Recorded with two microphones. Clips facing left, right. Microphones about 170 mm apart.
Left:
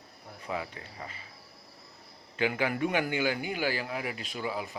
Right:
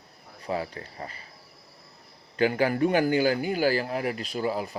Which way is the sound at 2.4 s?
40° right (ahead or behind).